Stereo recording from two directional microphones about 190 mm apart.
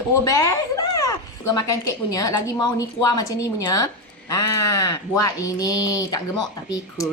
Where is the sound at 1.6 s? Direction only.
20° left (ahead or behind).